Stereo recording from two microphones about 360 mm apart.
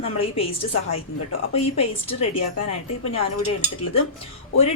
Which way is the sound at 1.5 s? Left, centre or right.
Left.